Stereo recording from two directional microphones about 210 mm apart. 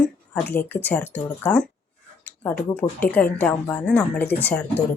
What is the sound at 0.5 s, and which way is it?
Speech, 10° left (ahead or behind).